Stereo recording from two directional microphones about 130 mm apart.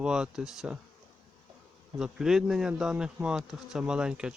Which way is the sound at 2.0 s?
5° right (ahead or behind).